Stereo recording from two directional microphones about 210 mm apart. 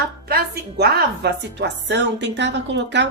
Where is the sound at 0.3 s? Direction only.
45° right (ahead or behind).